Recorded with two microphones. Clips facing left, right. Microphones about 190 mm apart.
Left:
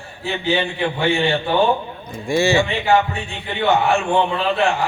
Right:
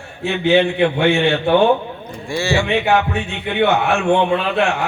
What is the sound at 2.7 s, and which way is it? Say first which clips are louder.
A man's voice: right 1 dB; 65° right (ahead or behind).